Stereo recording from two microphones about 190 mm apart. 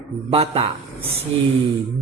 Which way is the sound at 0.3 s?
30° right (ahead or behind).